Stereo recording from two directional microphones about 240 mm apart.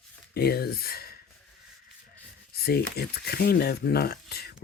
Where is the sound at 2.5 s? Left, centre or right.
Left.